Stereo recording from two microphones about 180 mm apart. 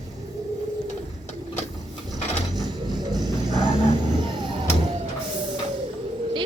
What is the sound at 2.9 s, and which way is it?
Music, 20° right (ahead or behind).